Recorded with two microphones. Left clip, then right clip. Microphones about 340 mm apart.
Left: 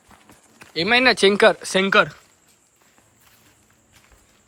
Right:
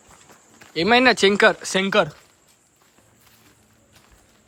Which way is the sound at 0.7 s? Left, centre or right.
Centre.